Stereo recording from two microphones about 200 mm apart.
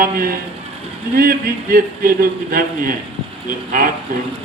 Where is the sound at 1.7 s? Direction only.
45° right (ahead or behind).